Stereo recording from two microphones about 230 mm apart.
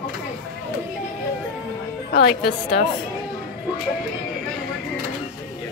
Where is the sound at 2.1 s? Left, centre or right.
Left.